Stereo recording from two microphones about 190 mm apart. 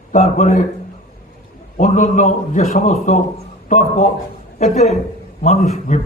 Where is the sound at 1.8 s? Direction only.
40° left (ahead or behind).